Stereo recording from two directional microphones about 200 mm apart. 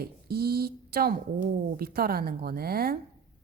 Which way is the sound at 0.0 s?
50° right (ahead or behind).